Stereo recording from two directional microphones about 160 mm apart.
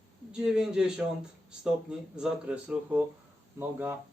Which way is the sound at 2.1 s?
10° right (ahead or behind).